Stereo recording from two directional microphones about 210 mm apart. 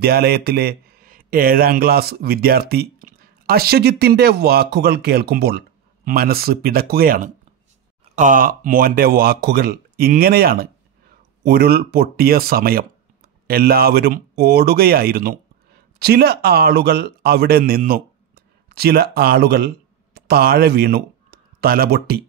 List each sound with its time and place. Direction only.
0.0 s speech: 45° right (ahead or behind)